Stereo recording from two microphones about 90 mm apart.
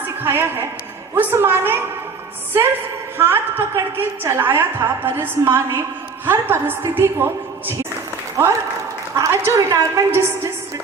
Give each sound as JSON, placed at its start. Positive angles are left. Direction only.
{"t": 0.2, "sound": "a sound", "side_deg": -25}
{"t": 1.1, "sound": "a woman's voice", "side_deg": -25}
{"t": 3.2, "sound": "a woman's voice", "side_deg": -25}
{"t": 9.1, "sound": "a woman's voice", "side_deg": -35}